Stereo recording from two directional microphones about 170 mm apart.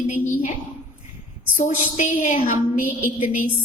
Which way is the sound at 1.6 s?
45° left (ahead or behind).